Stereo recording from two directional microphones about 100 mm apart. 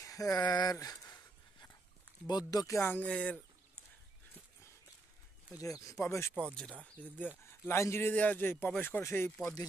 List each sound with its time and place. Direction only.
0.0 s a sound: 35° left (ahead or behind)
2.2 s speech: 40° left (ahead or behind)
2.8 s a man's voice: 20° left (ahead or behind)
3.1 s speech: 10° left (ahead or behind)
5.6 s speech: 35° left (ahead or behind)
6.8 s speech: 15° left (ahead or behind)
7.4 s a man's voice: 25° left (ahead or behind)